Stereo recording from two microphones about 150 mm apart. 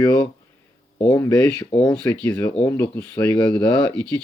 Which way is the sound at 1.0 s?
20° left (ahead or behind).